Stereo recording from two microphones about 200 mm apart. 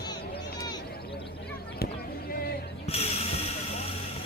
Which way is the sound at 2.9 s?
30° left (ahead or behind).